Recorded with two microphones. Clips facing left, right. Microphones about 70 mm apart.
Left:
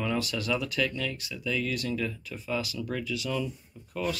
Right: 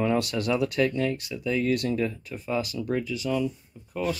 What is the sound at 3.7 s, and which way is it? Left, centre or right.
Speech, centre.